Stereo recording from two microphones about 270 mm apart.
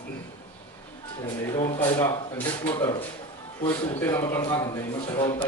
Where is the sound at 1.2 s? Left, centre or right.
Centre.